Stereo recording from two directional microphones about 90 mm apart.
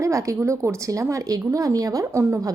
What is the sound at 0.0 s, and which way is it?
A woman's voice, 35° right (ahead or behind).